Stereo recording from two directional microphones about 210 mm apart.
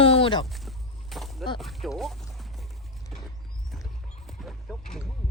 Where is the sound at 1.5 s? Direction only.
Centre (ahead or behind).